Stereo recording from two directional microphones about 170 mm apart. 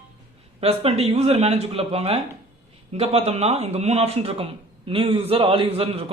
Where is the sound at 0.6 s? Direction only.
35° right (ahead or behind).